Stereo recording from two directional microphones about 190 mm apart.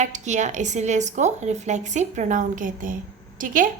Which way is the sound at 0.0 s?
40° right (ahead or behind).